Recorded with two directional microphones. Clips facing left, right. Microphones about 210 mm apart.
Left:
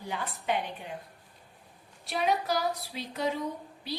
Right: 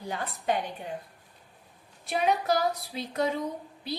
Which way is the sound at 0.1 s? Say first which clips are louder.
Right 2 dB; 40° right (ahead or behind).